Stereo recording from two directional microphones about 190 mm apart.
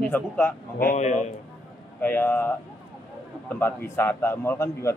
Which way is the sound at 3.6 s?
10° left (ahead or behind).